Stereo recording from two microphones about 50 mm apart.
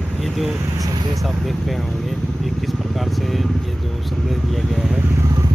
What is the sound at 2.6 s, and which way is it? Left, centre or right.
Speech, centre.